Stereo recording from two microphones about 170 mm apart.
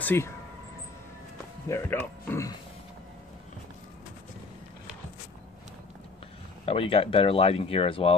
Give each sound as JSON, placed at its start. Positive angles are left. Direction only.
{"t": 0.0, "sound": "speech", "side_deg": 15}
{"t": 1.7, "sound": "speech", "side_deg": 10}
{"t": 6.6, "sound": "speech", "side_deg": 35}